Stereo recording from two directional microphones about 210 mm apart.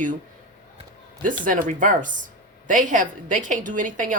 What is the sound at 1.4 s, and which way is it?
Speech, 40° right (ahead or behind).